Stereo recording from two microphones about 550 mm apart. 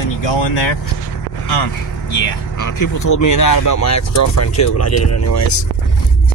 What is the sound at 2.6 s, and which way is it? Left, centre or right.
Speech, left.